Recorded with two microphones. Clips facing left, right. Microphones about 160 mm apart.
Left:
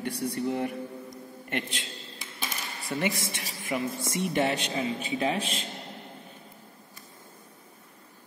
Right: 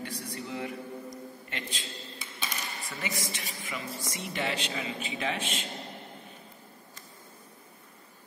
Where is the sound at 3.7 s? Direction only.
50° left (ahead or behind).